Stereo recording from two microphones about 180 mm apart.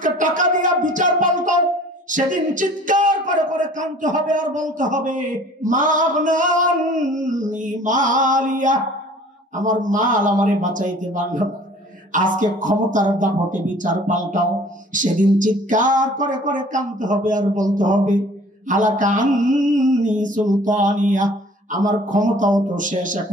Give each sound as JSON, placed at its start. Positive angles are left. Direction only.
{"t": 0.0, "sound": "a sound", "side_deg": -45}
{"t": 0.8, "sound": "music", "side_deg": -45}
{"t": 2.0, "sound": "speech", "side_deg": -45}